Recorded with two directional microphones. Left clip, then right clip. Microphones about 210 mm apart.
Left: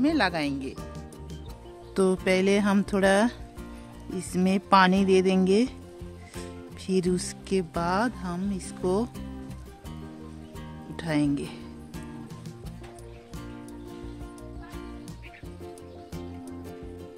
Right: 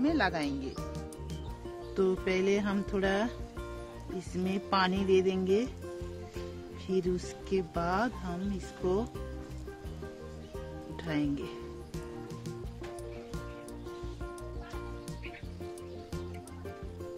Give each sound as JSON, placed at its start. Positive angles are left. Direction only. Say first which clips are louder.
{"t": 0.0, "sound": "speech", "louder": "left 5 dB", "side_deg": 40}
{"t": 2.0, "sound": "speech", "louder": "left 6 dB", "side_deg": 45}
{"t": 4.4, "sound": "speech", "louder": "left 9 dB", "side_deg": 50}
{"t": 6.9, "sound": "speech", "louder": "left 5 dB", "side_deg": 50}
{"t": 11.0, "sound": "speech", "louder": "left 7 dB", "side_deg": 45}